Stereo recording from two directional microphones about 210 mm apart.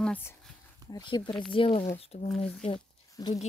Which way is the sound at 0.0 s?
10° left (ahead or behind).